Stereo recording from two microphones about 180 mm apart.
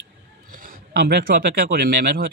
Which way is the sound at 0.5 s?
55° right (ahead or behind).